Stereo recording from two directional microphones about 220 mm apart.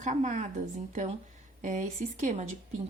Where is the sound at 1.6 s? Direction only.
35° right (ahead or behind).